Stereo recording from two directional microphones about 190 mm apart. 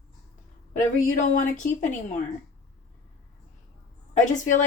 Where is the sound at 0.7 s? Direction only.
40° left (ahead or behind).